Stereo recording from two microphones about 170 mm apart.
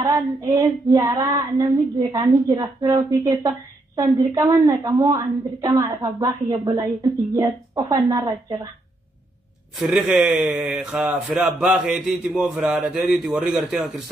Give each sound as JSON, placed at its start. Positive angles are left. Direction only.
{"t": 0.0, "sound": "a woman's voice", "side_deg": -20}
{"t": 9.8, "sound": "a man's voice", "side_deg": -5}